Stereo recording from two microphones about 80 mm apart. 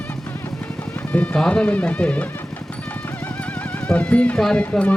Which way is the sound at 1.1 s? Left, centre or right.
Centre.